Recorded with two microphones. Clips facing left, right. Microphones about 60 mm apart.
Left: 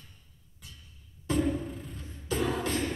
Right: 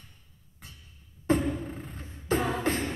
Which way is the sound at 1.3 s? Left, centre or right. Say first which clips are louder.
Right 2 dB; right.